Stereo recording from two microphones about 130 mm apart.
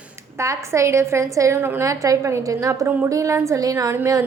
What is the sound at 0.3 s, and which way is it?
A woman's voice, 25° right (ahead or behind).